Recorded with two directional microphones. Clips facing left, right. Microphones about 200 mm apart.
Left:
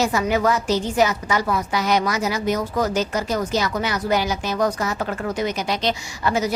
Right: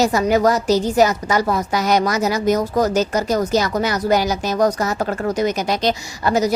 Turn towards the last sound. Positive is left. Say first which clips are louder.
# right 4 dB
turn(degrees=-40)  # may be behind; listen again after turning